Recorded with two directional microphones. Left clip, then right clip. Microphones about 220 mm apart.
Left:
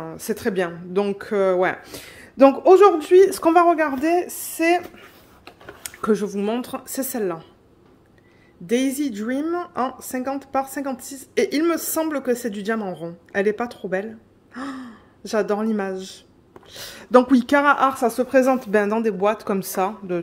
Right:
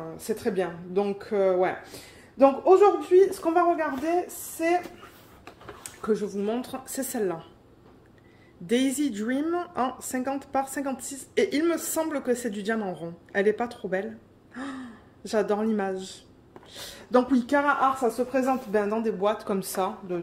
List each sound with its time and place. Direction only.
0.0 s speech: 40° left (ahead or behind)
8.6 s a woman's voice: 20° left (ahead or behind)